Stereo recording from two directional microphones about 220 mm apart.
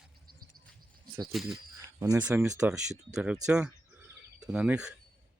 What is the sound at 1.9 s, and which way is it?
Speech, 15° right (ahead or behind).